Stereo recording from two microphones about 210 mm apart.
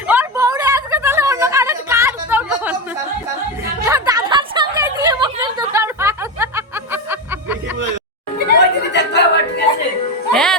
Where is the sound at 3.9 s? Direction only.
15° right (ahead or behind).